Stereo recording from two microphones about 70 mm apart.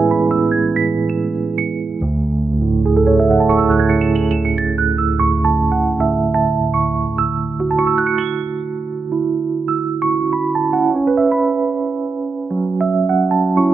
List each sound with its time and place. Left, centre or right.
0.0 s music: centre
2.9 s music: centre
9.7 s music: centre
12.5 s music: centre